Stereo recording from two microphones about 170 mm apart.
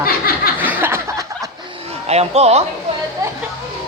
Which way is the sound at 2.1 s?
40° right (ahead or behind).